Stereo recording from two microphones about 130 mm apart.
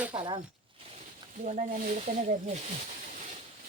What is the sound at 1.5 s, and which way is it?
Speech, 90° right.